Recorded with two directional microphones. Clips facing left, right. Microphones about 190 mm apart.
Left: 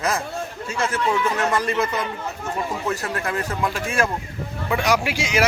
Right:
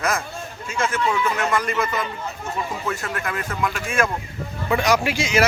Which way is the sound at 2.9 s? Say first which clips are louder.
Left 2 dB; 30° left (ahead or behind).